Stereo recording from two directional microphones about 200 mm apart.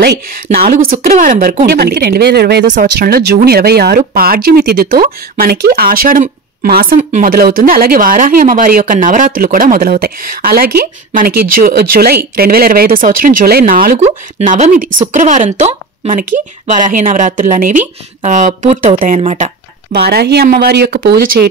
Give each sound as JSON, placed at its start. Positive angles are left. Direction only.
{"t": 0.6, "sound": "a woman's voice", "side_deg": -45}
{"t": 19.9, "sound": "speech", "side_deg": -55}